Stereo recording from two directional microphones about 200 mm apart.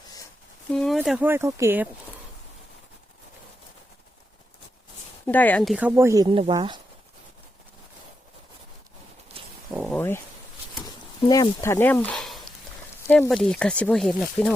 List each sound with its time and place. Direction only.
0.7 s speech: centre (ahead or behind)
5.2 s speech: 10° left (ahead or behind)
5.7 s speech: 10° right (ahead or behind)
9.3 s a sound: 30° right (ahead or behind)
9.9 s a sound: 10° left (ahead or behind)
11.3 s speech: 15° left (ahead or behind)